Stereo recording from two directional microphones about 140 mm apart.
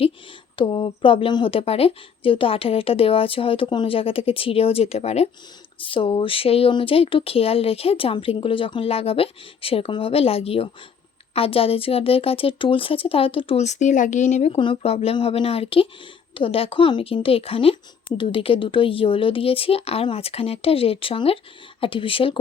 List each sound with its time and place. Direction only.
0.5 s speech: 35° left (ahead or behind)
5.8 s speech: 40° left (ahead or behind)
14.6 s speech: 40° left (ahead or behind)